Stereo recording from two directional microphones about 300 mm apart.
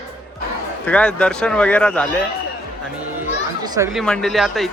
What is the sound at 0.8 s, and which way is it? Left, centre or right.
Speech, centre.